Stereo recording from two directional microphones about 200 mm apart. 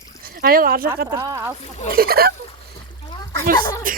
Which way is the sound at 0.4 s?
45° right (ahead or behind).